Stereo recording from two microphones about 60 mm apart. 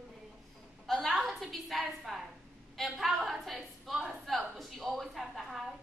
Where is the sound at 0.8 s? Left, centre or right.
Centre.